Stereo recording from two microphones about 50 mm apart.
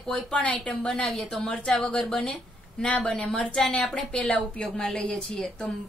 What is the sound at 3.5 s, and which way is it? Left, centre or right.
Speech, centre.